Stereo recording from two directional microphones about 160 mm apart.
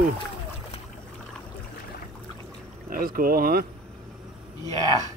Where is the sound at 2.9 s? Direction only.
65° right (ahead or behind).